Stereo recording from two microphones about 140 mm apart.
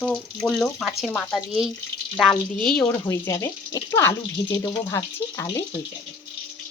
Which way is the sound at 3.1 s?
20° left (ahead or behind).